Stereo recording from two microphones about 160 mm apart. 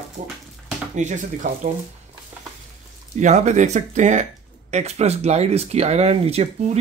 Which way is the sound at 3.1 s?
45° right (ahead or behind).